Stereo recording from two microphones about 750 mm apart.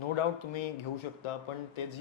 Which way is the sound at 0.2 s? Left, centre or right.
Left.